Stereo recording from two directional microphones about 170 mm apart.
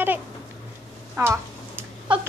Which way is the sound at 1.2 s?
15° right (ahead or behind).